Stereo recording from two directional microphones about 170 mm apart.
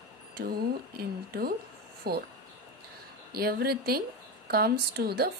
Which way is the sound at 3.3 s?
65° right (ahead or behind).